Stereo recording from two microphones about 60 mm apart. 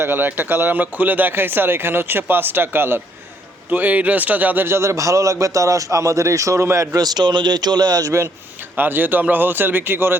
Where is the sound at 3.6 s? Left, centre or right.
Right.